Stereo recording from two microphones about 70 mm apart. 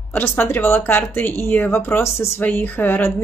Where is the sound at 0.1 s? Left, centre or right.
Left.